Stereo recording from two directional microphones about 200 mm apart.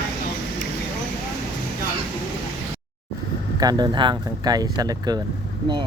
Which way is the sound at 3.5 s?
20° right (ahead or behind).